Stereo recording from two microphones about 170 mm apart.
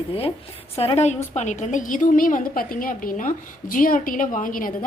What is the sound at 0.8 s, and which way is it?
A woman's voice, 40° left (ahead or behind).